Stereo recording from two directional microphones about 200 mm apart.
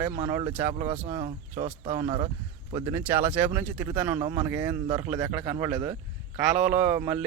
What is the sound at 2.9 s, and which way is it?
Speech, 10° right (ahead or behind).